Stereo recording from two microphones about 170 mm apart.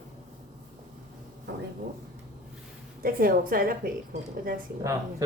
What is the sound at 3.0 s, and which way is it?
Speech, 60° right (ahead or behind).